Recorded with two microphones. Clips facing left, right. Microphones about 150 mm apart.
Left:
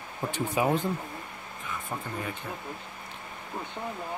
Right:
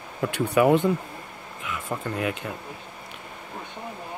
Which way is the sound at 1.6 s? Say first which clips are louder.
Right 5 dB; 85° right.